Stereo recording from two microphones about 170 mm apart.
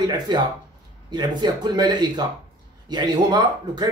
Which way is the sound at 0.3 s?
25° right (ahead or behind).